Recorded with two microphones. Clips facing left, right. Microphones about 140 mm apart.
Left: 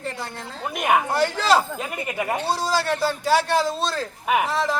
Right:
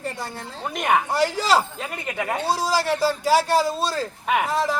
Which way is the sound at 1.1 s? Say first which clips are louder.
Left 1 dB; 5° right (ahead or behind).